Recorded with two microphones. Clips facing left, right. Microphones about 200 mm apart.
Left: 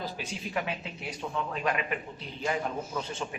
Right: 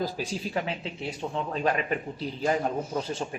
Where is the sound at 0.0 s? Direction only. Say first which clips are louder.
Right 6 dB; 35° right (ahead or behind).